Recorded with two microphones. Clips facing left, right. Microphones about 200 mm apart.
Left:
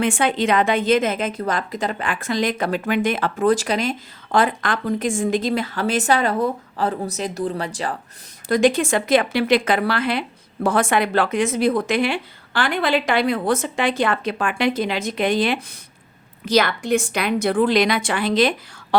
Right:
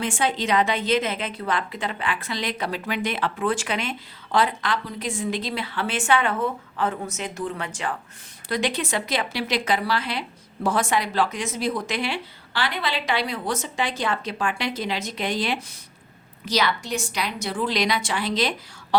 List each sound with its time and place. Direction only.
0.0 s a woman's voice: 60° left (ahead or behind); by 7.9 s 35° left (ahead or behind)
8.4 s a woman's voice: 45° left (ahead or behind)